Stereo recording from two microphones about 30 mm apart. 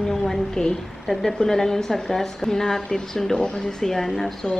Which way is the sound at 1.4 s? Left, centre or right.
Centre.